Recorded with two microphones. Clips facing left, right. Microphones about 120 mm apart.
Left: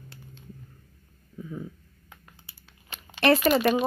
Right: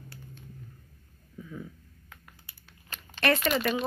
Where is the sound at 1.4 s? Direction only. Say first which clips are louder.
Left 4 dB; 25° left (ahead or behind).